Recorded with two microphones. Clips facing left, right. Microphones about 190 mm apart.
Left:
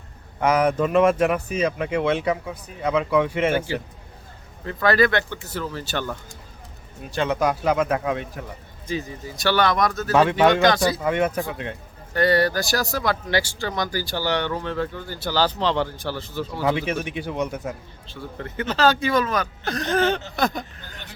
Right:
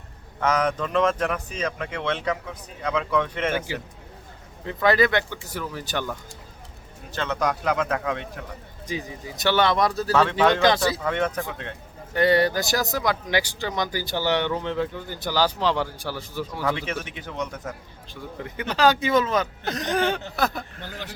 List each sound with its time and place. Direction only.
0.3 s speech: 10° left (ahead or behind)
4.6 s speech: 20° right (ahead or behind)
7.1 s speech: 10° left (ahead or behind)
8.9 s speech: 15° right (ahead or behind)
10.1 s speech: 10° left (ahead or behind)
12.1 s speech: 20° right (ahead or behind)
16.5 s speech: 15° left (ahead or behind)
18.1 s speech: 15° right (ahead or behind)